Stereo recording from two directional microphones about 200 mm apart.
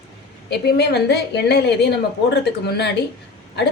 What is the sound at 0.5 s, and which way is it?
A woman's voice, 55° left (ahead or behind).